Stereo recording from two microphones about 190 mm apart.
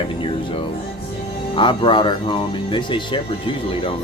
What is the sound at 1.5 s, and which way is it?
Speech, 25° left (ahead or behind).